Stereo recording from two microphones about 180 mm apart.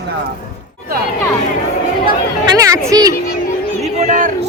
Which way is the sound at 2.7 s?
20° right (ahead or behind).